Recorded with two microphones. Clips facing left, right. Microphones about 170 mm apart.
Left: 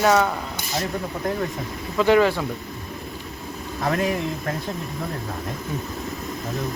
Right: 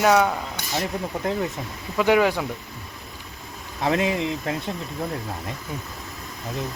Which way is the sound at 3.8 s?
20° right (ahead or behind).